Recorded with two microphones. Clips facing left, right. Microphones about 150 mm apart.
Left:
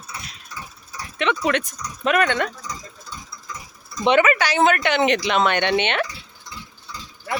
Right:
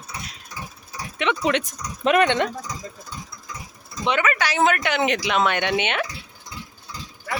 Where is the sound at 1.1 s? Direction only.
15° right (ahead or behind).